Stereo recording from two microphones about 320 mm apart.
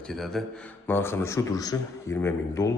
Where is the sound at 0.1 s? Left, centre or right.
Centre.